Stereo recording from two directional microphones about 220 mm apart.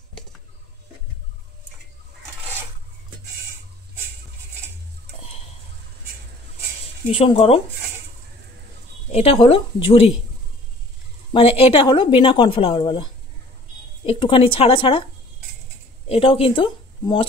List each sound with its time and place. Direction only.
7.1 s speech: 25° left (ahead or behind)
9.1 s speech: 25° left (ahead or behind)
11.3 s speech: 25° left (ahead or behind)
16.1 s speech: 25° left (ahead or behind)